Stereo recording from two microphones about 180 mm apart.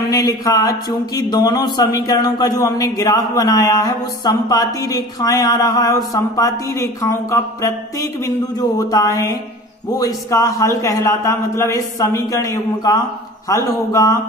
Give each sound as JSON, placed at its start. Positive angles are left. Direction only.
{"t": 0.1, "sound": "a man's voice", "side_deg": 20}